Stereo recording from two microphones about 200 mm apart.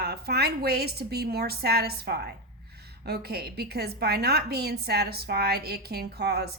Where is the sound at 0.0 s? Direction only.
50° right (ahead or behind).